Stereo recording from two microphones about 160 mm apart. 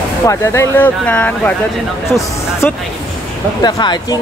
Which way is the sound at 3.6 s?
25° left (ahead or behind).